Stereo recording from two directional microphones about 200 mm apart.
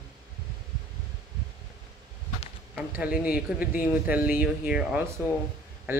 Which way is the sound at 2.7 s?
5° right (ahead or behind).